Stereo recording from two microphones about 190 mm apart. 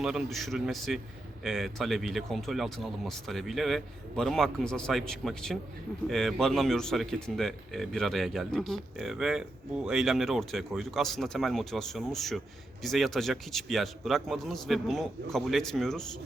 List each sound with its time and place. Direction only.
0.0 s speech: centre (ahead or behind)